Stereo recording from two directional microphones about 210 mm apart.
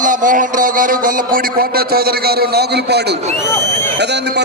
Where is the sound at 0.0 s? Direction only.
40° right (ahead or behind).